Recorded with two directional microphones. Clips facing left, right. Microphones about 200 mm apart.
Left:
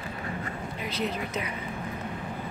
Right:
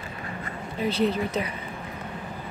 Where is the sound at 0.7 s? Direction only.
30° right (ahead or behind).